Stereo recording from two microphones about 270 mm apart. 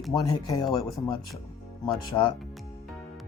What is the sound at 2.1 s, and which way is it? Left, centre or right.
Speech, centre.